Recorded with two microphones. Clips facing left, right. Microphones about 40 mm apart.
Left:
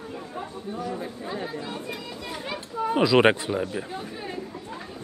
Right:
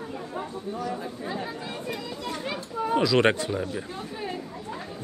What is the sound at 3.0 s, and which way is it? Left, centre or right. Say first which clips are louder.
Speech: left 4 dB; centre.